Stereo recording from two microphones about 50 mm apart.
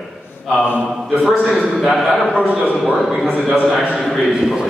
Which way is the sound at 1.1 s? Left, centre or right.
Centre.